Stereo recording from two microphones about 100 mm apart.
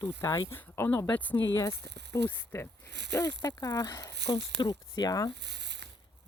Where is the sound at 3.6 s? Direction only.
35° left (ahead or behind).